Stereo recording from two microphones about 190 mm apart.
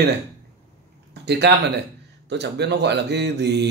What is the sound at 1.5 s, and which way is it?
Speech, 65° right (ahead or behind).